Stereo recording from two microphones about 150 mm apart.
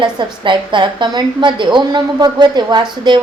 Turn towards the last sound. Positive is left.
turn(degrees=-30)  # may be behind; listen again after turning